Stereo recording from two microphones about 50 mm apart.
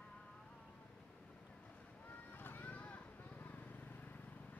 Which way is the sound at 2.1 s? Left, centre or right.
Left.